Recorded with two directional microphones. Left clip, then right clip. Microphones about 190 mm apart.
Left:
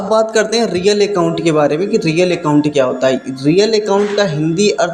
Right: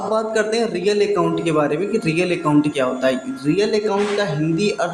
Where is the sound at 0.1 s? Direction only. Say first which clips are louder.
Left 7 dB; 30° left (ahead or behind).